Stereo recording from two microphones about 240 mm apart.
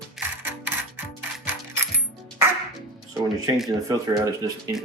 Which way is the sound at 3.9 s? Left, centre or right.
Centre.